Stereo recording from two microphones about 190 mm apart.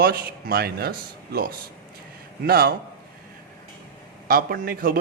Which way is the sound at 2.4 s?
55° right (ahead or behind).